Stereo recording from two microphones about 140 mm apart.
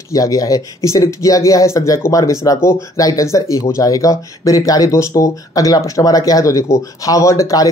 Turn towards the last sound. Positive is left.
turn(degrees=20)  # may be behind; listen again after turning